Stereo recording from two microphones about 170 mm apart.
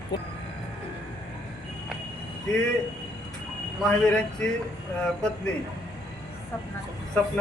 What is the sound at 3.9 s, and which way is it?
Speech, 5° left (ahead or behind).